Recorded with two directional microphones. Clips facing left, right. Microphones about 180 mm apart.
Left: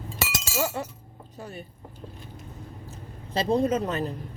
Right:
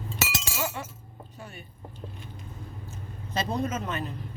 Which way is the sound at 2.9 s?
30° left (ahead or behind).